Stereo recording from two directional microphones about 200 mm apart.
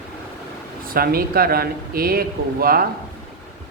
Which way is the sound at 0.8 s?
45° right (ahead or behind).